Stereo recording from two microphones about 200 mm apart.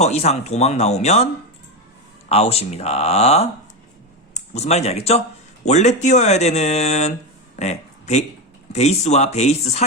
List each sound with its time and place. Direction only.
0.0 s speech: 35° left (ahead or behind)
2.3 s speech: 30° left (ahead or behind)
7.6 s a sound: 35° left (ahead or behind)
8.7 s speech: 35° left (ahead or behind)